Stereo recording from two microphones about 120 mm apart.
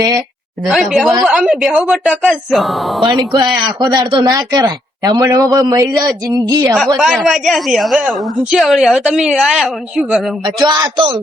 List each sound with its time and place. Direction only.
0.7 s a woman's voice: centre (ahead or behind)
3.2 s a man's voice: 30° right (ahead or behind)
6.7 s a woman's voice: centre (ahead or behind)
10.7 s a man's voice: 40° right (ahead or behind)